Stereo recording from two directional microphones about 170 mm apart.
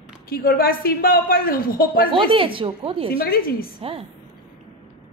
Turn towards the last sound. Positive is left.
turn(degrees=-35)  # may be behind; listen again after turning